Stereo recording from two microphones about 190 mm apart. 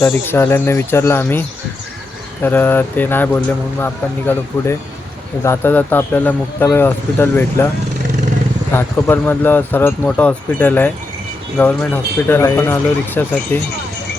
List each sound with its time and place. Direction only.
0.0 s speech: 10° left (ahead or behind)
8.7 s speech: 10° left (ahead or behind)